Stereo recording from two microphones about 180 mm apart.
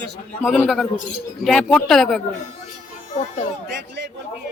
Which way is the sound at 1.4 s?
Centre (ahead or behind).